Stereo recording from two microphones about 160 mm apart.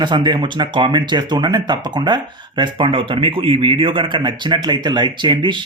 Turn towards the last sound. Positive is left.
turn(degrees=-30)  # may be behind; listen again after turning